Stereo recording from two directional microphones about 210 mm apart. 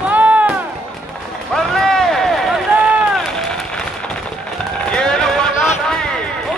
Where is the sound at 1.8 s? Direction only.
Centre (ahead or behind).